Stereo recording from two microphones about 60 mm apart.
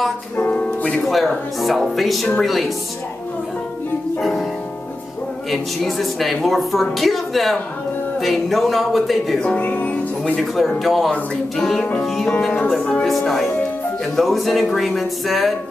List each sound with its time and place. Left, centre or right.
0.4 s music: left
1.0 s a woman's voice: centre
5.5 s a woman's voice: centre
9.6 s music: left
10.4 s a woman's voice: centre
11.1 s music: centre
11.8 s music: centre
13.0 s a woman's voice: centre